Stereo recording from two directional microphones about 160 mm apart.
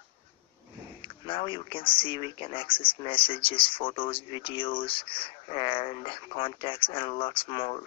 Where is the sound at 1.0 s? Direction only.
35° left (ahead or behind).